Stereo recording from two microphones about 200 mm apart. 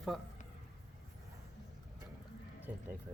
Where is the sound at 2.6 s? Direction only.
10° right (ahead or behind).